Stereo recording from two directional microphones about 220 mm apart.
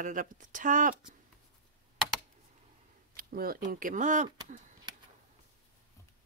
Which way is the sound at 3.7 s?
35° right (ahead or behind).